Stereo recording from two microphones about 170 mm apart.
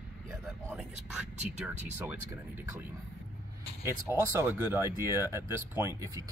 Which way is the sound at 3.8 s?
15° right (ahead or behind).